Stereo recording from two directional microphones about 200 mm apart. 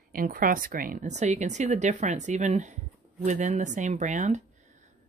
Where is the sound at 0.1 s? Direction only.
45° right (ahead or behind).